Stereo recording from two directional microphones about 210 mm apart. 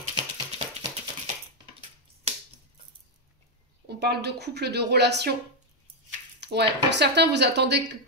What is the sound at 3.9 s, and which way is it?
A woman's voice, 50° right (ahead or behind).